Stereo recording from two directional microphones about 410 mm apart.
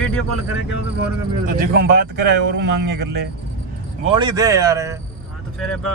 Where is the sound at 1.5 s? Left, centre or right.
Right.